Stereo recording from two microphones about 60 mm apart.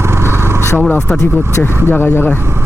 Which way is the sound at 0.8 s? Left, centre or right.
Left.